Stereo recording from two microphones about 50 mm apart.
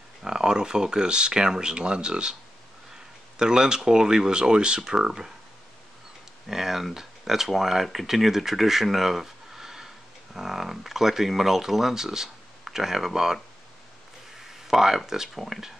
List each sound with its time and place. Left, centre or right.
0.2 s speech: centre
3.3 s speech: centre
6.4 s speech: centre
14.4 s speech: centre